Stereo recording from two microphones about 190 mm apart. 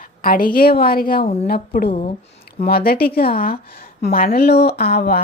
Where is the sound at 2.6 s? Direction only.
55° left (ahead or behind).